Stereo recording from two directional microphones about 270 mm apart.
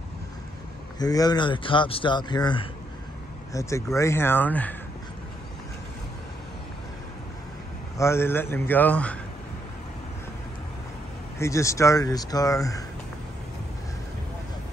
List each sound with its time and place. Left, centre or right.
0.9 s a man's voice: centre
8.0 s a man's voice: centre
11.3 s a man's voice: centre